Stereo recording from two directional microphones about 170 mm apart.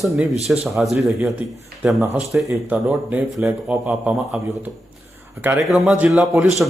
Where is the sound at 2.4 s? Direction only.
15° right (ahead or behind).